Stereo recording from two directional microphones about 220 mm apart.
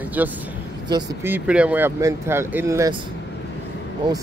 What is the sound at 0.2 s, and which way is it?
Speech, 10° right (ahead or behind).